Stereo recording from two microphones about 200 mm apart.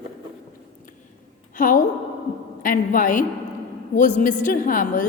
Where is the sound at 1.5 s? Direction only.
40° left (ahead or behind).